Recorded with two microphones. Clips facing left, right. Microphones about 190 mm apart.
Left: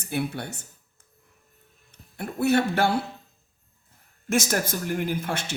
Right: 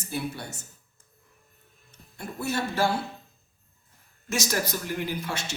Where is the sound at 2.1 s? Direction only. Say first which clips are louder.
Left 8 dB; 60° left (ahead or behind).